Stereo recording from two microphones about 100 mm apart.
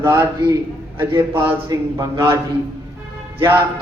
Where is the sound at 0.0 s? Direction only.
30° right (ahead or behind).